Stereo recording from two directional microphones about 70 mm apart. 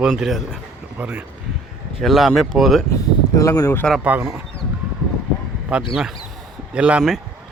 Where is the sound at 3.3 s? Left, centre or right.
Left.